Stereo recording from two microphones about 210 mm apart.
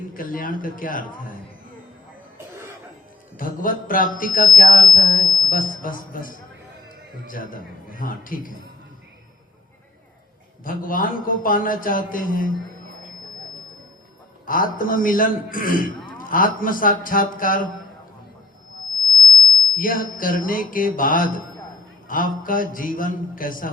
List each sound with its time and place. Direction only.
0.1 s speech: 40° left (ahead or behind)
3.3 s speech: 40° left (ahead or behind)
10.6 s speech: 40° left (ahead or behind)
14.4 s a man's voice: 40° left (ahead or behind)
19.7 s speech: 40° left (ahead or behind)